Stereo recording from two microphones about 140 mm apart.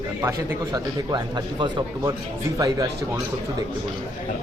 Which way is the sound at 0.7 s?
30° right (ahead or behind).